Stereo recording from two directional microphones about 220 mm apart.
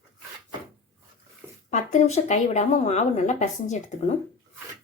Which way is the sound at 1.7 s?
30° left (ahead or behind).